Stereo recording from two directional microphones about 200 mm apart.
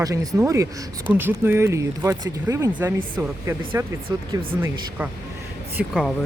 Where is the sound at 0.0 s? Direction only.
15° right (ahead or behind).